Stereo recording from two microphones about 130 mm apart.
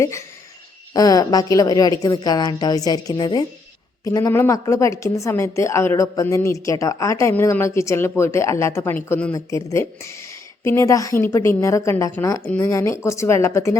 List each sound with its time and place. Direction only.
0.0 s a woman's voice: 25° left (ahead or behind)
9.3 s speech: 25° left (ahead or behind)